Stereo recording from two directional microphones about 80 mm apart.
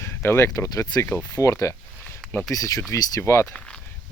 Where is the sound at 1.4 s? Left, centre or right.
Left.